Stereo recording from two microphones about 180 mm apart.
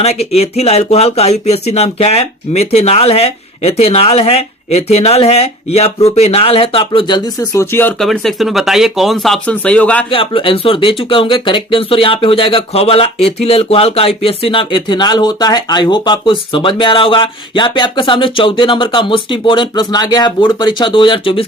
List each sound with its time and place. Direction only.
0.0 s speech: 35° left (ahead or behind); by 10.1 s 5° left (ahead or behind)
10.1 s speech: 30° left (ahead or behind)